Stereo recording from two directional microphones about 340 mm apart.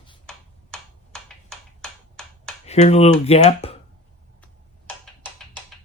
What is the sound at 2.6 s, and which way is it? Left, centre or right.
Speech, centre.